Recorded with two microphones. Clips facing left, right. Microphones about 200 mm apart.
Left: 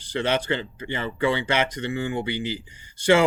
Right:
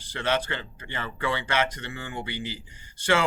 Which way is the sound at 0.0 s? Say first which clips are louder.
Left 3 dB; 15° left (ahead or behind).